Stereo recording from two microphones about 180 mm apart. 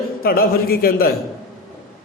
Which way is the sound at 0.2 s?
55° left (ahead or behind).